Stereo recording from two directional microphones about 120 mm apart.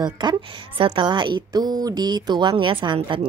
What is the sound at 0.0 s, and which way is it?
A woman's voice, 35° right (ahead or behind).